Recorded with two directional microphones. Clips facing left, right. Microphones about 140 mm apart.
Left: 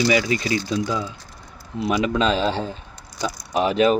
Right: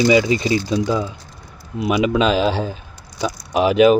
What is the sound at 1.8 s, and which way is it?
Speech, 15° right (ahead or behind).